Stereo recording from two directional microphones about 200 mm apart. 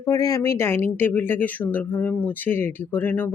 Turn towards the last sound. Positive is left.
turn(degrees=10)  # may be behind; listen again after turning